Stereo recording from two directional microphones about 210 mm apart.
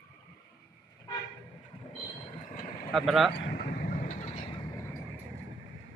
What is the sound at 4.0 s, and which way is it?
Vehicle, 40° left (ahead or behind).